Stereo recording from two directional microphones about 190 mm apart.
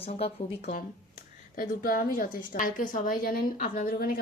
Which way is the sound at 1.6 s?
50° left (ahead or behind).